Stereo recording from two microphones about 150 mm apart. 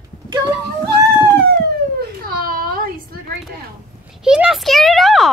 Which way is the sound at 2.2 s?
80° right.